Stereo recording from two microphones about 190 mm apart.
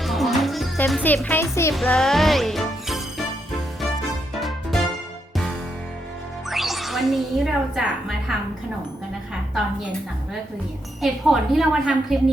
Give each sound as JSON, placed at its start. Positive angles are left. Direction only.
{"t": 0.0, "sound": "music", "side_deg": 0}
{"t": 1.7, "sound": "music", "side_deg": 0}
{"t": 4.4, "sound": "music", "side_deg": 0}
{"t": 6.5, "sound": "speech", "side_deg": 0}
{"t": 11.0, "sound": "speech", "side_deg": 0}